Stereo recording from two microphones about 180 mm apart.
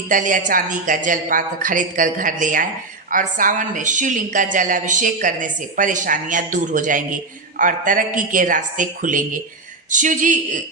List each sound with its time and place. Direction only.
0.1 s a woman's voice: 45° right (ahead or behind)